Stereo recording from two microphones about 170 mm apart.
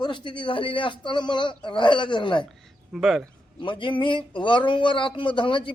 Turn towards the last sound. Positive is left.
turn(degrees=30)  # may be behind; listen again after turning